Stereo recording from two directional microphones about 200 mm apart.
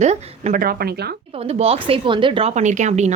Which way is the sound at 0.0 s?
40° right (ahead or behind).